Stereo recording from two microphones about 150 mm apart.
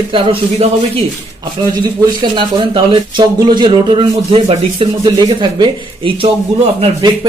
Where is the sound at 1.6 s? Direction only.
30° right (ahead or behind).